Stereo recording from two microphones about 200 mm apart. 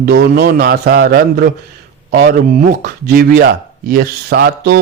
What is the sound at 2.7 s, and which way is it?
Speech, 45° right (ahead or behind).